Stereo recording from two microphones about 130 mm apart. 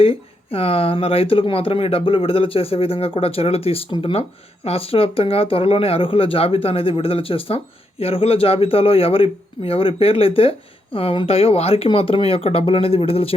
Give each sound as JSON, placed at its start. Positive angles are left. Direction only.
{"t": 0.0, "sound": "speech", "side_deg": 45}